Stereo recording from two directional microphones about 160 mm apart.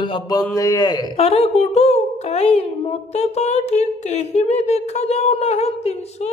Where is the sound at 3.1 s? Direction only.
45° left (ahead or behind).